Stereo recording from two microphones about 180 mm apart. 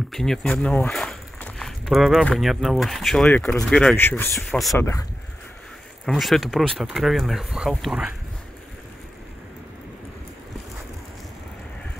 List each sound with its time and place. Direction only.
0.1 s speech: 5° left (ahead or behind)
4.7 s speech: 15° left (ahead or behind)
6.0 s speech: centre (ahead or behind)